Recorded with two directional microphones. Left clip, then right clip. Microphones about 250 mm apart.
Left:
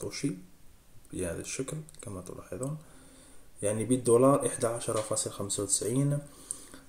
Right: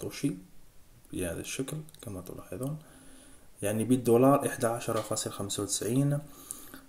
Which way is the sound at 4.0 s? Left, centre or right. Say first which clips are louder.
Even; centre.